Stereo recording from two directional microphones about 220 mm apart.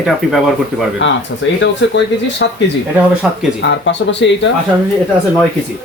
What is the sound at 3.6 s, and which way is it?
Speech, 55° left (ahead or behind).